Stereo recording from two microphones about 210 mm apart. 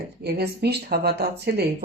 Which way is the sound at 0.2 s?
50° right (ahead or behind).